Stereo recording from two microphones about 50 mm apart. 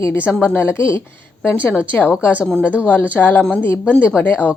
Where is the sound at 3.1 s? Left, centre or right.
Left.